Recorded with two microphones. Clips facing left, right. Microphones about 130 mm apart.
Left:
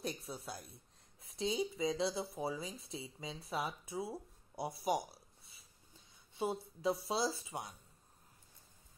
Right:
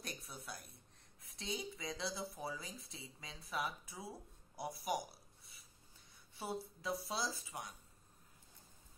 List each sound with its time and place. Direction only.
0.0 s speech: 25° left (ahead or behind)
4.6 s a sound: 25° left (ahead or behind)
6.3 s speech: 25° left (ahead or behind)